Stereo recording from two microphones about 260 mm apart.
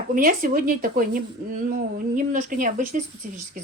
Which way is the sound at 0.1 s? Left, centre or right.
Right.